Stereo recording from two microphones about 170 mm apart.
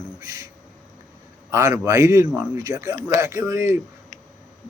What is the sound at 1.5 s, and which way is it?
A man's voice, 15° right (ahead or behind).